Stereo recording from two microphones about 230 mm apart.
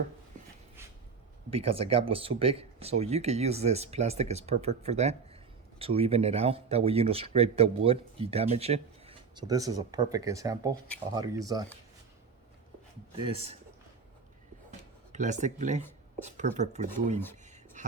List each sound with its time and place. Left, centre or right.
1.5 s speech: right
13.1 s speech: right
15.1 s speech: right
17.4 s a sound: right